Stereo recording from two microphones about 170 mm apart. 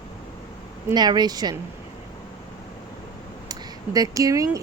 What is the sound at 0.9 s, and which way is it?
Speech, 25° right (ahead or behind).